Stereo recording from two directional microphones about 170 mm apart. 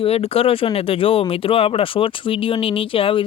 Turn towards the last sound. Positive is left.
turn(degrees=30)  # may be behind; listen again after turning